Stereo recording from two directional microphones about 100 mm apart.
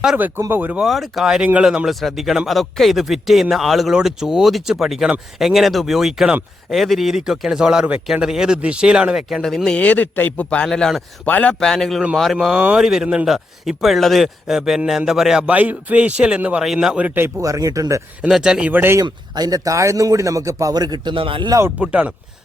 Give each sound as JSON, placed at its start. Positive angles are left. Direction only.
{"t": 0.2, "sound": "speech", "side_deg": -20}
{"t": 0.8, "sound": "speech", "side_deg": 0}
{"t": 17.2, "sound": "speech", "side_deg": -25}
{"t": 18.2, "sound": "speech", "side_deg": -5}
{"t": 18.7, "sound": "speech", "side_deg": -20}
{"t": 19.0, "sound": "speech", "side_deg": -45}
{"t": 21.8, "sound": "speech", "side_deg": -10}